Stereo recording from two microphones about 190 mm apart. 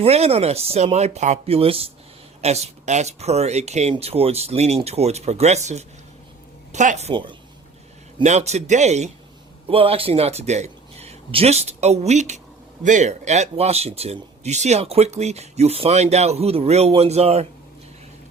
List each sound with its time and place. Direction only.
0.0 s speech: 30° right (ahead or behind)
8.2 s speech: 35° right (ahead or behind)